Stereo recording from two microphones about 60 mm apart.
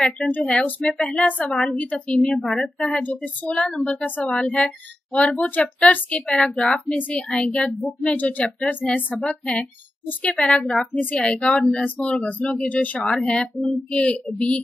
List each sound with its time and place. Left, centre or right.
0.2 s speech: left
2.1 s a woman's voice: centre
3.0 s speech: left
10.9 s a woman's voice: left